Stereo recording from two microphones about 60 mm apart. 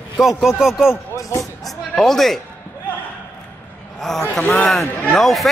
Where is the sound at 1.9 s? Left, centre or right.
Centre.